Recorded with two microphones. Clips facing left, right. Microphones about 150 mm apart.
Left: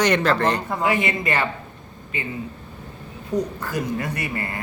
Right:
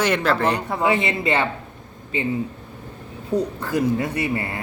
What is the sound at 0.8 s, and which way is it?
Speech, 30° right (ahead or behind).